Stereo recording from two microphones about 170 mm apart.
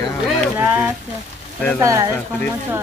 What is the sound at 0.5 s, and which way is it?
Speech, 10° right (ahead or behind).